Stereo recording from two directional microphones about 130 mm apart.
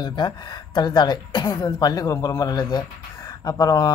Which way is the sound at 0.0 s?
35° left (ahead or behind).